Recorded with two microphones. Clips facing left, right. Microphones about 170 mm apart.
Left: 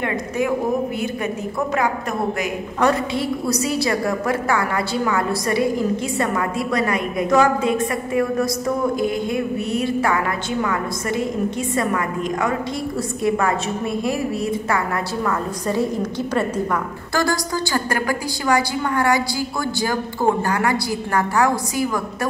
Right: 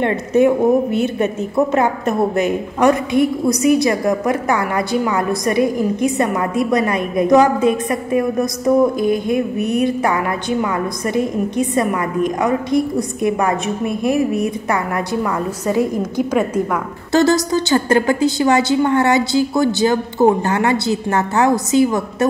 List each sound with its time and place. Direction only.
0.0 s a woman's voice: 25° right (ahead or behind)
11.5 s a woman's voice: 20° right (ahead or behind)
17.1 s a woman's voice: 20° right (ahead or behind)